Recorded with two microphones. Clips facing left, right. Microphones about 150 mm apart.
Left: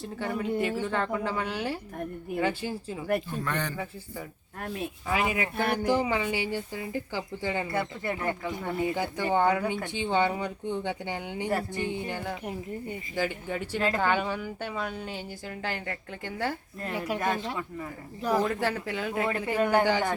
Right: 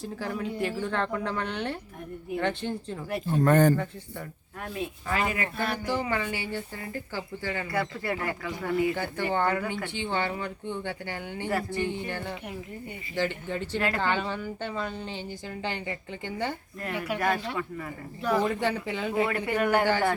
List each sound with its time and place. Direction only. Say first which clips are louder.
0.0 s a woman's voice: left 1 dB; centre (ahead or behind)
3.2 s a man's voice: right 11 dB; 45° right (ahead or behind)
5.0 s speech: left 2 dB; 15° left (ahead or behind)
16.8 s speech: right 1 dB; 30° left (ahead or behind)
18.4 s a woman's voice: right 1 dB; centre (ahead or behind)
19.5 s speech: even; 20° left (ahead or behind)